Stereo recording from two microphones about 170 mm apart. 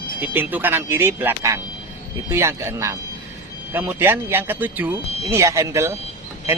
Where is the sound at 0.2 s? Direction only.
10° right (ahead or behind).